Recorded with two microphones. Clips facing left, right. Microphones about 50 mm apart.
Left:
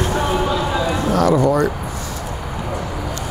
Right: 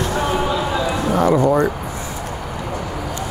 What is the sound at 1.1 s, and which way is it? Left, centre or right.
Speech, right.